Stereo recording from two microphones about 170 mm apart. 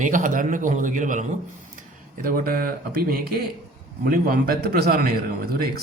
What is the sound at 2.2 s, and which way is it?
Speech, 60° right (ahead or behind).